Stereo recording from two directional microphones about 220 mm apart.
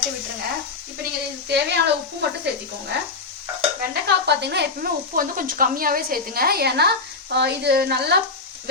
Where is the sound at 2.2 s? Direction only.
50° right (ahead or behind).